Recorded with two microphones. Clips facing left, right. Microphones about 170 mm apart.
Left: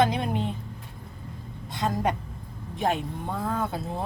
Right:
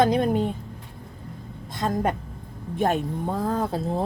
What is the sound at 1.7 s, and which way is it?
A woman's voice, 45° right (ahead or behind).